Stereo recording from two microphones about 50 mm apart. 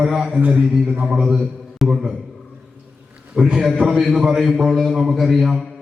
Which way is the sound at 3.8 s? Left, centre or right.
Centre.